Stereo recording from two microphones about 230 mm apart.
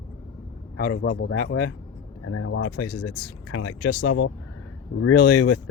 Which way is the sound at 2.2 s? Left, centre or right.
Left.